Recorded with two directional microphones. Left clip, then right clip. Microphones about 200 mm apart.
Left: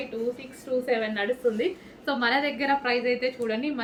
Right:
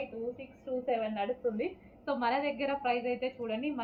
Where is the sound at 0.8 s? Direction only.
20° left (ahead or behind).